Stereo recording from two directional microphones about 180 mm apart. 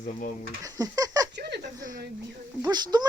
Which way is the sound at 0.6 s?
20° right (ahead or behind).